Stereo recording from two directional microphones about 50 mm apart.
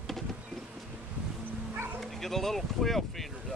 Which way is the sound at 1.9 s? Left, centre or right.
Centre.